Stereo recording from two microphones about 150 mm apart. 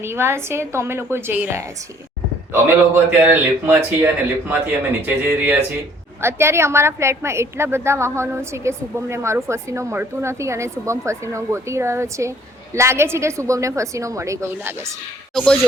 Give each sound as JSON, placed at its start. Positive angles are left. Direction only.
{"t": 0.0, "sound": "a woman's voice", "side_deg": -15}